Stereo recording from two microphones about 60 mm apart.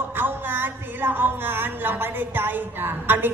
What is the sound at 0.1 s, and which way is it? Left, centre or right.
Speech, right.